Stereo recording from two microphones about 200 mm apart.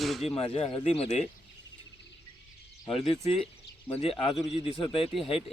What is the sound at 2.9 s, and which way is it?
Speech, 30° left (ahead or behind).